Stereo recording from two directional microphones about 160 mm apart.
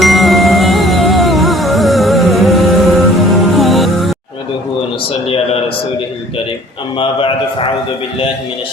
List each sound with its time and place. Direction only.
0.0 s music: centre (ahead or behind)
7.0 s a man's voice: 35° left (ahead or behind)